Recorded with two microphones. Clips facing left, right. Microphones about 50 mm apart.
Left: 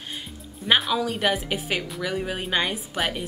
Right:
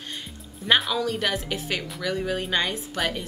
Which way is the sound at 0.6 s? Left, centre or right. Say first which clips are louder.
Even; centre.